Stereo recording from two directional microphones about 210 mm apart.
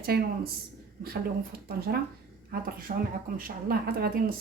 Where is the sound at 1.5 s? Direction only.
45° right (ahead or behind).